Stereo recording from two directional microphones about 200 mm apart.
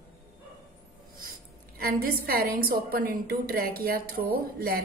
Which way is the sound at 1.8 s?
50° right (ahead or behind).